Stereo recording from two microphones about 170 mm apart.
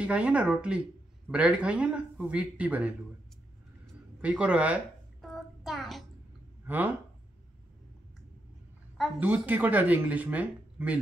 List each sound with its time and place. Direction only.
0.0 s speech: 5° right (ahead or behind)
3.8 s a sound: 5° right (ahead or behind)
6.6 s speech: 10° right (ahead or behind)
9.2 s speech: 10° right (ahead or behind)